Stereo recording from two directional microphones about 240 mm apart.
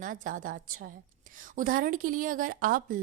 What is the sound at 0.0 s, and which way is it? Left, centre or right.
A woman's voice, right.